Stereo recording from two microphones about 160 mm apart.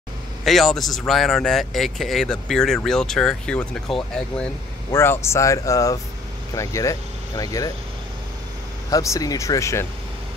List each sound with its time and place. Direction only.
0.5 s speech: centre (ahead or behind); by 7.7 s 20° left (ahead or behind)
8.9 s speech: 20° left (ahead or behind)